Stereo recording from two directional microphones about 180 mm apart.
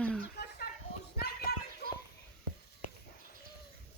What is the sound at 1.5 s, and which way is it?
Children playing, 60° left (ahead or behind).